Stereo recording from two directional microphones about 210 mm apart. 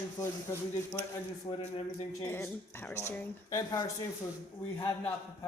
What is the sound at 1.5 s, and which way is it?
Speech, 25° left (ahead or behind).